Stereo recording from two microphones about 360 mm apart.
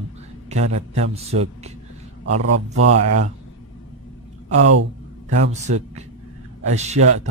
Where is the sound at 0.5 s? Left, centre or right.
Centre.